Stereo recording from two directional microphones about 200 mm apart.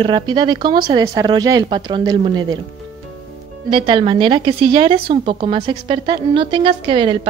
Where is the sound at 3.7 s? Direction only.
25° right (ahead or behind).